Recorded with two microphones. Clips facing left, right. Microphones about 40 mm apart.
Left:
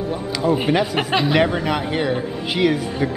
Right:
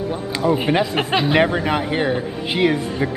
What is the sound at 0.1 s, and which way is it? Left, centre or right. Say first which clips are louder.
A man's voice: even; centre.